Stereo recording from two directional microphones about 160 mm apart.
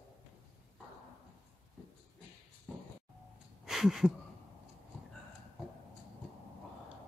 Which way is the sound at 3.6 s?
Centre (ahead or behind).